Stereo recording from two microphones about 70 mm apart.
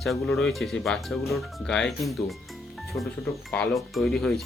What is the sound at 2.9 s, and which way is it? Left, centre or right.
Speech, left.